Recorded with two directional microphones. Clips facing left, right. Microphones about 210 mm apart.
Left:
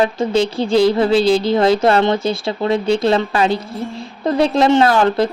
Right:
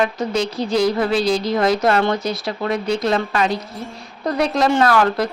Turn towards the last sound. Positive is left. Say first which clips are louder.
# left 3 dB
turn(degrees=25)  # may be behind; listen again after turning